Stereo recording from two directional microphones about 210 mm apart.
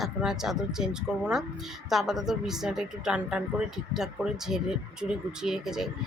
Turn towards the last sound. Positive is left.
turn(degrees=0)  # may be behind; listen again after turning